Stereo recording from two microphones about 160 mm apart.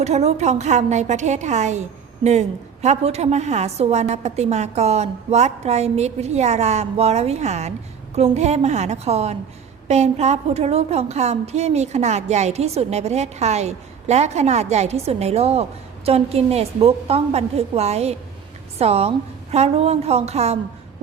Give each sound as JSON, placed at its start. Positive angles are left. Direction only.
{"t": 0.0, "sound": "a woman's voice", "side_deg": -45}